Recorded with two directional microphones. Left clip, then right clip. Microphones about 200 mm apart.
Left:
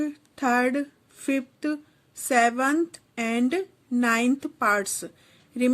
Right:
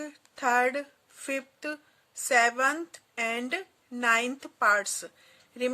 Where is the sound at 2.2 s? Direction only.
10° left (ahead or behind).